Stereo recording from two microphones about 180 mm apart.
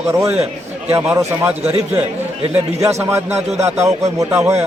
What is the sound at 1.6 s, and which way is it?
Speech, 35° right (ahead or behind).